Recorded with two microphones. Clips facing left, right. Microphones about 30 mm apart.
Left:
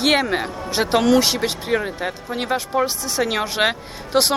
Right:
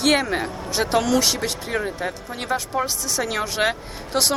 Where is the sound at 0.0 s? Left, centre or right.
Centre.